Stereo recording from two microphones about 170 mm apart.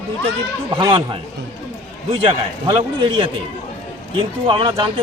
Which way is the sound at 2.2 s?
30° right (ahead or behind).